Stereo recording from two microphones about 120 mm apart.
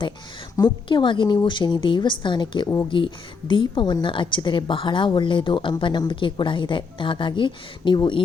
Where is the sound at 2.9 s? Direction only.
45° left (ahead or behind).